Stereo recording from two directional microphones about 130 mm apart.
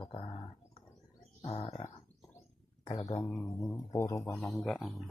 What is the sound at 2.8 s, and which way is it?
Speech, 50° left (ahead or behind).